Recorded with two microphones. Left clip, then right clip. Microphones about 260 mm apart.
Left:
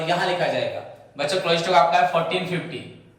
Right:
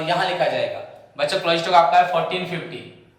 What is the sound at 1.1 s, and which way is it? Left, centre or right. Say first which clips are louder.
A man's voice: right 2 dB; centre.